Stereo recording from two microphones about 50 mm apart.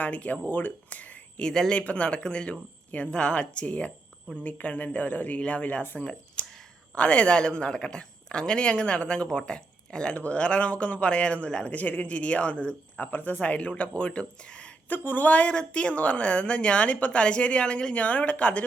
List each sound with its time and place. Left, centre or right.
0.0 s speech: left
1.4 s speech: centre
1.7 s speech: left
6.4 s a sound: left
6.9 s speech: left
14.8 s speech: left